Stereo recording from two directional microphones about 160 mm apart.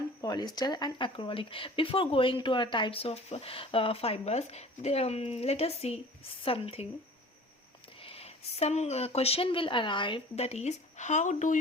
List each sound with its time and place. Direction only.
0.2 s speech: 25° left (ahead or behind)
8.0 s speech: 35° left (ahead or behind)